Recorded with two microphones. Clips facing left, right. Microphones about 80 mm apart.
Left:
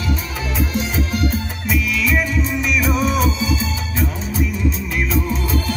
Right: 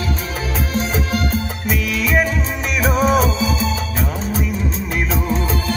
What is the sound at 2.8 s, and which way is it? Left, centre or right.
Music, right.